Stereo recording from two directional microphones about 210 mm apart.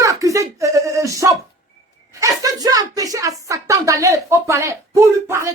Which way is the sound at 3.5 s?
15° right (ahead or behind).